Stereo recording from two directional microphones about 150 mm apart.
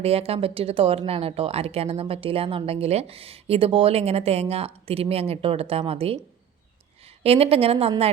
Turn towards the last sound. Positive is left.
turn(degrees=-40)  # may be behind; listen again after turning